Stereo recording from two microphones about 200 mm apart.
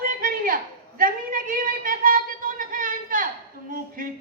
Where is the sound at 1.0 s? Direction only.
45° right (ahead or behind).